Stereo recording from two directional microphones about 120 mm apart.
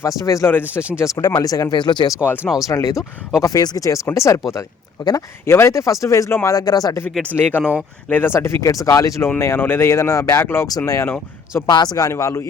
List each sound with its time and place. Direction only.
0.2 s speech: 25° left (ahead or behind)
2.2 s speech: 15° left (ahead or behind)
2.6 s speech: 30° left (ahead or behind)
7.3 s speech: 15° left (ahead or behind)
7.6 s speech: 10° right (ahead or behind)
8.1 s speech: 20° left (ahead or behind)